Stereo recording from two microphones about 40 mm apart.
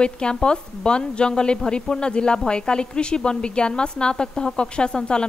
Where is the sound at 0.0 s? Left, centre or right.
Left.